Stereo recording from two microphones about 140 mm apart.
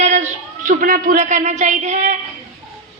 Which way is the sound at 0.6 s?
75° right (ahead or behind).